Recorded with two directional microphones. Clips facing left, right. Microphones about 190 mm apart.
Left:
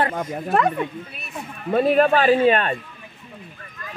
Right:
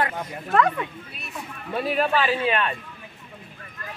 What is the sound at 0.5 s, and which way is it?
Speech, 30° left (ahead or behind).